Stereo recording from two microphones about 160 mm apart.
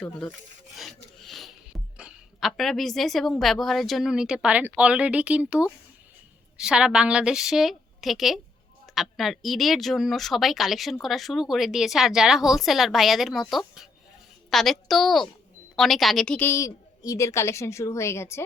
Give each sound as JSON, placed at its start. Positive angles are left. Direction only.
{"t": 0.0, "sound": "a woman's voice", "side_deg": 5}